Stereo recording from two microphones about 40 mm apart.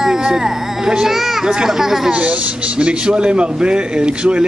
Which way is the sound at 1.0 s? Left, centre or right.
Centre.